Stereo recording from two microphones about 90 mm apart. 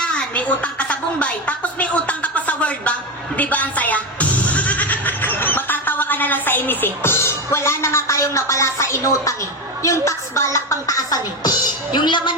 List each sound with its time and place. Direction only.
0.0 s a woman's voice: 10° left (ahead or behind); by 12.3 s 60° left (ahead or behind)